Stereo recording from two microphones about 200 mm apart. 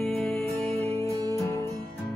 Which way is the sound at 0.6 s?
30° right (ahead or behind).